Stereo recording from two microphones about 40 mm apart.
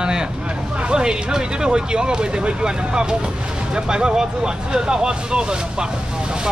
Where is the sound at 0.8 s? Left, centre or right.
Right.